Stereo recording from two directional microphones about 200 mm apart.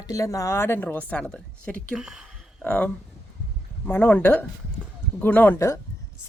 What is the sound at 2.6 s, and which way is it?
A woman's voice, 10° left (ahead or behind).